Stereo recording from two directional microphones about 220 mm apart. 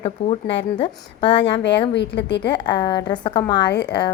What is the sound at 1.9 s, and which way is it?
Speech, 50° left (ahead or behind).